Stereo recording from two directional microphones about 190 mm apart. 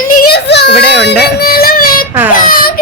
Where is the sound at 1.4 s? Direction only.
50° left (ahead or behind).